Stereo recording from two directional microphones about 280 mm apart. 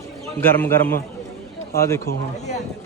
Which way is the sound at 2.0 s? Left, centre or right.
Left.